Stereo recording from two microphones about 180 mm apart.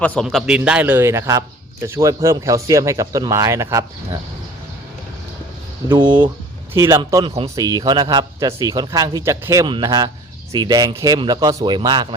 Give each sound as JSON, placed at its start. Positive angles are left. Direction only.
{"t": 0.0, "sound": "a man's voice", "side_deg": 5}
{"t": 5.9, "sound": "a man's voice", "side_deg": -25}